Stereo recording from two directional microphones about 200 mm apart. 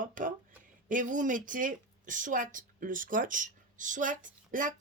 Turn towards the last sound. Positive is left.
turn(degrees=-40)  # may be behind; listen again after turning